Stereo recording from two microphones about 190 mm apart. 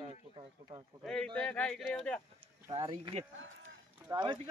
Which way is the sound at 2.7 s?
30° right (ahead or behind).